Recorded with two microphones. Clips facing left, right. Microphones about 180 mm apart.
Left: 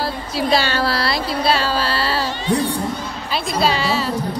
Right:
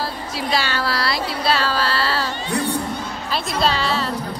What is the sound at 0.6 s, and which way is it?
Speech, 30° left (ahead or behind).